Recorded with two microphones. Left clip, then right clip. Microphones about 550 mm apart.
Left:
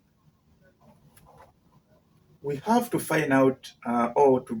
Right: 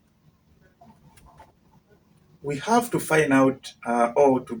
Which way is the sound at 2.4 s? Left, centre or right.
Left.